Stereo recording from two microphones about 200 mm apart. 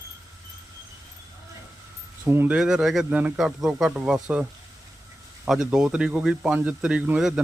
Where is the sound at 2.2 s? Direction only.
10° right (ahead or behind).